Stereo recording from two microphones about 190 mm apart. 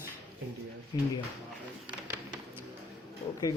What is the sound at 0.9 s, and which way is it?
Speech, 20° left (ahead or behind).